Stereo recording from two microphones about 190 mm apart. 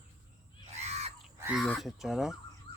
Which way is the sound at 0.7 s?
35° right (ahead or behind).